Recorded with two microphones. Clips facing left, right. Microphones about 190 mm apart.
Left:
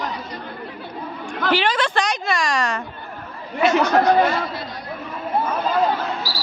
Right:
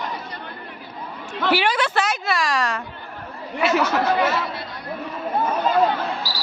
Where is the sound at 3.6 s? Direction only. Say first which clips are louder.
Left 2 dB; 5° right (ahead or behind).